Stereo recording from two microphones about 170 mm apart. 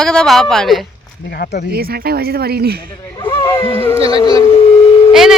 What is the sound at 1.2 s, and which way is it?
Speech, 70° left (ahead or behind).